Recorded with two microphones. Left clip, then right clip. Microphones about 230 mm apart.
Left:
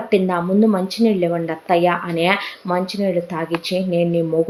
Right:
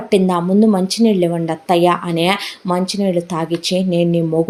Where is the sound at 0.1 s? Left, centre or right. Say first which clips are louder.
Right 3 dB; right.